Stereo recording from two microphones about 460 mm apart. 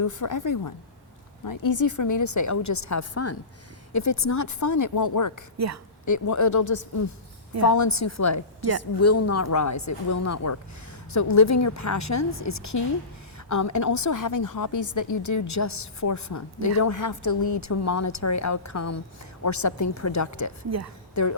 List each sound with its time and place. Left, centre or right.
0.0 s a woman's voice: left
5.5 s a woman's voice: right
6.1 s a woman's voice: left
20.7 s a woman's voice: right
21.2 s a woman's voice: left